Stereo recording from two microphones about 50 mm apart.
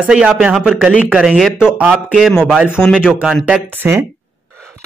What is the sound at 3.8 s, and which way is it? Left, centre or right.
Speech, right.